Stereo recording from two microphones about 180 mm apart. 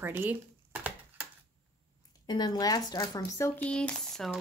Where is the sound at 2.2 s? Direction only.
25° left (ahead or behind).